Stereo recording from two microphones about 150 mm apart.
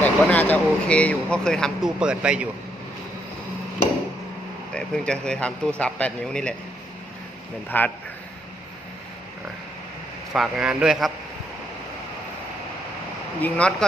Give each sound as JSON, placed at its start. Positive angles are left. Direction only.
{"t": 0.0, "sound": "speech", "side_deg": 10}
{"t": 4.7, "sound": "speech", "side_deg": 5}
{"t": 7.7, "sound": "speech", "side_deg": 10}
{"t": 10.3, "sound": "speech", "side_deg": -5}
{"t": 13.4, "sound": "speech", "side_deg": 5}